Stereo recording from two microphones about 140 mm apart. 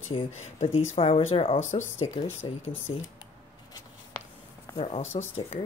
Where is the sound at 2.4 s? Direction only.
35° left (ahead or behind).